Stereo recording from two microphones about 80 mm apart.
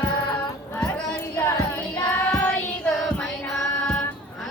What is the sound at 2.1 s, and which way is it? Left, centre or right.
Child singing, centre.